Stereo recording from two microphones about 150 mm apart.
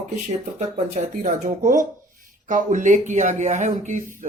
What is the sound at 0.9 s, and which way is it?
Speech, 60° right (ahead or behind).